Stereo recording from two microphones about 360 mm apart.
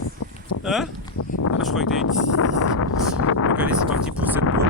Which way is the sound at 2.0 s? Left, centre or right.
Left.